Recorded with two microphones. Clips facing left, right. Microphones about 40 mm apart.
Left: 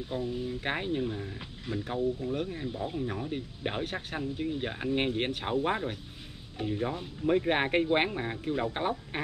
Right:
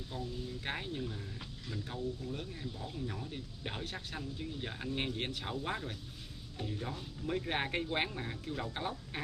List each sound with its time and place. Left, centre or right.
0.1 s speech: left